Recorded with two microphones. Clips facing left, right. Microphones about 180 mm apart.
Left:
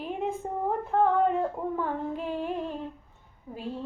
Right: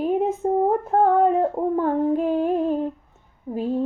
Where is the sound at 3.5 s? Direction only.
45° right (ahead or behind).